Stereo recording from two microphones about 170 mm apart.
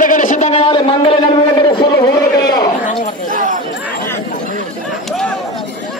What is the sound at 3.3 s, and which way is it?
Speech, 50° right (ahead or behind).